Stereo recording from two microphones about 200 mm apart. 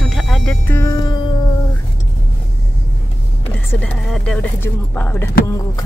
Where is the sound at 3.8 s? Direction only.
5° left (ahead or behind).